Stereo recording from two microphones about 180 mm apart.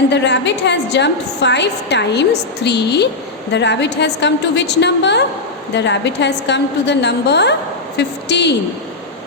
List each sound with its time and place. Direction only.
0.1 s a woman's voice: 75° left (ahead or behind)